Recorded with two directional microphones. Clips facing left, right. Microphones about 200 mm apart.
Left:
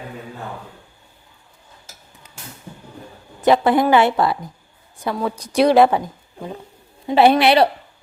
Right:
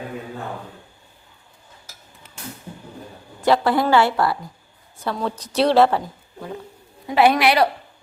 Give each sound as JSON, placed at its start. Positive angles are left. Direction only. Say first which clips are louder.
{"t": 3.4, "sound": "a woman's voice", "louder": "left 3 dB", "side_deg": 20}
{"t": 7.1, "sound": "a woman's voice", "louder": "left 3 dB", "side_deg": 30}